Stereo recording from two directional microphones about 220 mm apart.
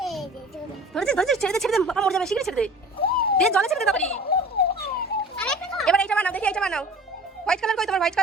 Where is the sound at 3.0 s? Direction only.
45° left (ahead or behind).